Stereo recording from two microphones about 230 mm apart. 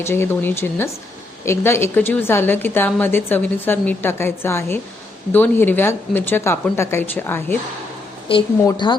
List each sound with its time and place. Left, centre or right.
0.0 s a woman's voice: centre
8.3 s a woman's voice: left